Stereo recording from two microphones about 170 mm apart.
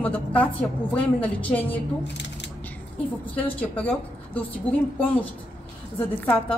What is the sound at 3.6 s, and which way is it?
A woman's voice, 10° left (ahead or behind).